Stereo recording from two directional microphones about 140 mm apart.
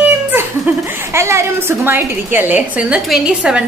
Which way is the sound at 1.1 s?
20° right (ahead or behind).